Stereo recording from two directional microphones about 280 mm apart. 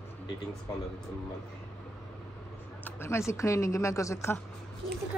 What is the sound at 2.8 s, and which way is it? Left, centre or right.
Speech, centre.